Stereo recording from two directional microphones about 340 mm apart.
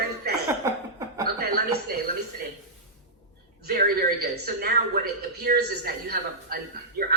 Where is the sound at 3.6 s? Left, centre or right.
Right.